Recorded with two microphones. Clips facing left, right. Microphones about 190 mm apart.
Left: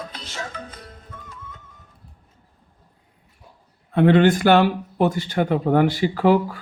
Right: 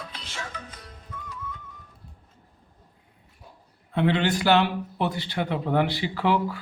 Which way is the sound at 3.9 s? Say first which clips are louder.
Left 8 dB; 50° left (ahead or behind).